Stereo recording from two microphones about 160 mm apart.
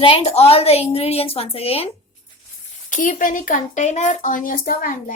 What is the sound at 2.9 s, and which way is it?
A woman's voice, 55° left (ahead or behind).